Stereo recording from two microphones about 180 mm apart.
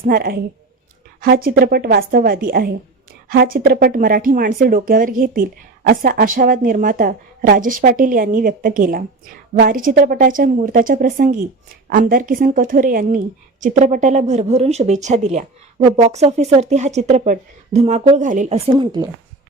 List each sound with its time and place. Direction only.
0.0 s a woman's voice: 55° right (ahead or behind)
18.5 s speech: 30° right (ahead or behind)